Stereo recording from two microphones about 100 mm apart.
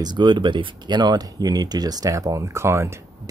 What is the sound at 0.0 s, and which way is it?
Speech, 50° right (ahead or behind).